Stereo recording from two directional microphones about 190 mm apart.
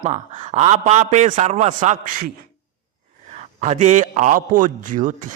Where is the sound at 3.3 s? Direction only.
35° right (ahead or behind).